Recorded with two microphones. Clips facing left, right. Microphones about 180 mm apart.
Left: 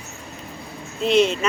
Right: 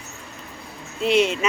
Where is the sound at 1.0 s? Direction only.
10° right (ahead or behind).